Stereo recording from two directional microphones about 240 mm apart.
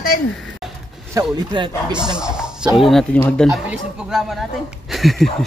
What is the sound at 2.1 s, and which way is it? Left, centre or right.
Speech, centre.